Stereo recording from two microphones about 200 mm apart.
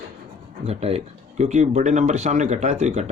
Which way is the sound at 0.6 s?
30° right (ahead or behind).